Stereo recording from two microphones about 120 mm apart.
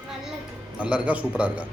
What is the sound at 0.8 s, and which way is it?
Speech, 10° right (ahead or behind).